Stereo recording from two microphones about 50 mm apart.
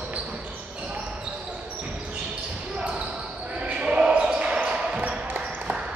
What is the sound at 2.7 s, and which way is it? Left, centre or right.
Basketball bounce, right.